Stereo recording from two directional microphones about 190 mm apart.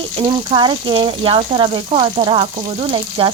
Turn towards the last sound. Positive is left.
turn(degrees=-25)  # may be behind; listen again after turning